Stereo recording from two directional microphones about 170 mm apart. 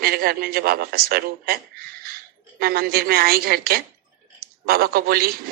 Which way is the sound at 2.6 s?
60° right (ahead or behind).